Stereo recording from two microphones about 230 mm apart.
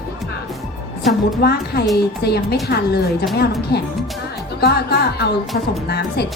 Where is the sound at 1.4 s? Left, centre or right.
Left.